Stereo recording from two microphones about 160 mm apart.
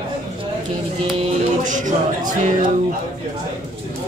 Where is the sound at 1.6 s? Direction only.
55° right (ahead or behind).